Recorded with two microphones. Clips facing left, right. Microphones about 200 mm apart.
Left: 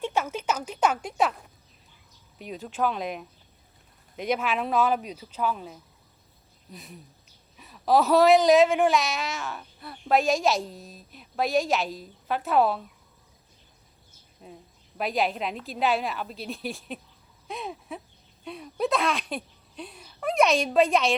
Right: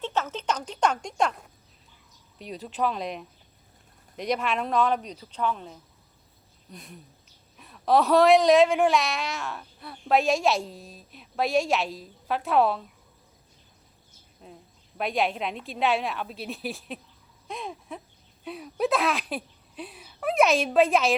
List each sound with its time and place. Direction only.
0.0 s a woman's voice: 10° left (ahead or behind)
14.4 s a woman's voice: 5° left (ahead or behind)